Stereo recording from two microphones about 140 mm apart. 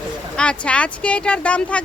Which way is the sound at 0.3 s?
10° left (ahead or behind).